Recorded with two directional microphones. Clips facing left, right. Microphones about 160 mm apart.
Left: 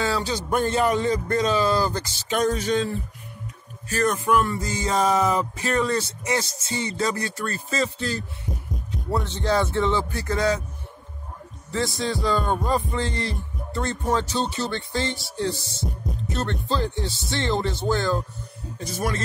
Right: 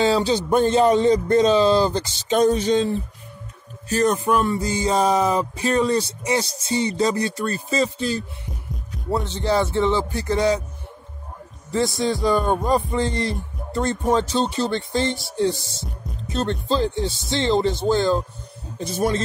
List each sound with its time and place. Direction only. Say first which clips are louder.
0.0 s speech: right 7 dB; 25° right (ahead or behind)
11.7 s heart sounds: right 4 dB; 15° right (ahead or behind)
16.6 s speech: right 4 dB; 20° right (ahead or behind)